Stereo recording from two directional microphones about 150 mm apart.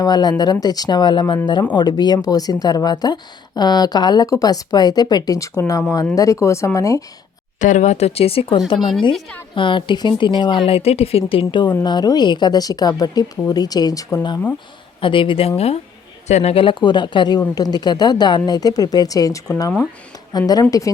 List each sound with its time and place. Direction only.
0.0 s speech: 30° left (ahead or behind)
7.6 s speech: 55° left (ahead or behind); by 20.9 s 25° left (ahead or behind)